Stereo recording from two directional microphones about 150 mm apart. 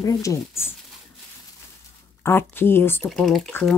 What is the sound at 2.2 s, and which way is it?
Speech, 15° left (ahead or behind).